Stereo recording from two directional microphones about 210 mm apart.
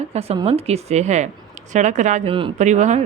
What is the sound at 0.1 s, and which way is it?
Speech, 30° right (ahead or behind).